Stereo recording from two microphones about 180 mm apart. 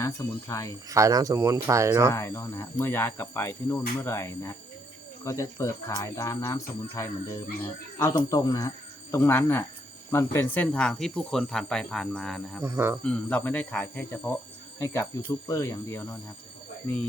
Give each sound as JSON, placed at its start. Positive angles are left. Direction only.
{"t": 0.0, "sound": "speech", "side_deg": 15}
{"t": 0.9, "sound": "speech", "side_deg": -20}
{"t": 2.1, "sound": "speech", "side_deg": 15}
{"t": 12.6, "sound": "speech", "side_deg": -10}
{"t": 13.0, "sound": "speech", "side_deg": 5}